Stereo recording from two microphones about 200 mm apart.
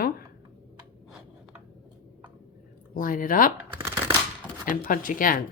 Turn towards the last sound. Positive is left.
turn(degrees=40)  # may be behind; listen again after turning